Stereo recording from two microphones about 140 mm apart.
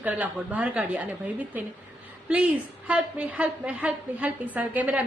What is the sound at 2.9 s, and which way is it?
A woman's voice, 10° right (ahead or behind).